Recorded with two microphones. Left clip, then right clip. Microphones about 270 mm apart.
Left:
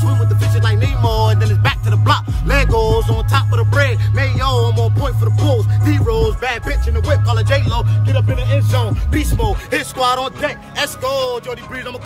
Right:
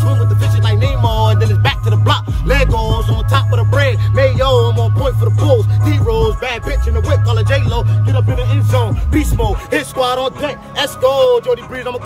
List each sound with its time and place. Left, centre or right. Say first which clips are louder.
0.7 s music: right 2 dB; centre